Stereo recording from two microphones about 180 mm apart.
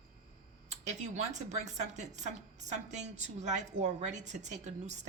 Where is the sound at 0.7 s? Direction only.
40° right (ahead or behind).